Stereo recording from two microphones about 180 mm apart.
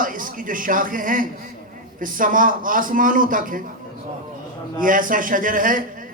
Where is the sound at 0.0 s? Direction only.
50° right (ahead or behind).